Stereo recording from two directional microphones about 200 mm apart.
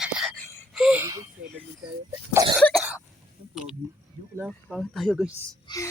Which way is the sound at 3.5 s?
5° right (ahead or behind).